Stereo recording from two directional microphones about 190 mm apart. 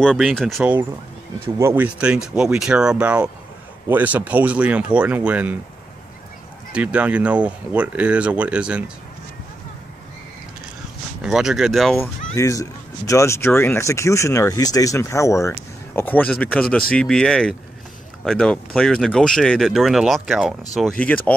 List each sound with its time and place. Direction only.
0.0 s speech: 5° left (ahead or behind)
1.6 s speech: 10° right (ahead or behind)
6.7 s speech: 5° right (ahead or behind)
11.2 s speech: 5° right (ahead or behind)
12.0 s speech: 15° left (ahead or behind); by 20.9 s centre (ahead or behind)